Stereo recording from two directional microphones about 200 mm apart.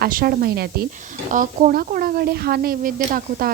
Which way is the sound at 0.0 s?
50° right (ahead or behind).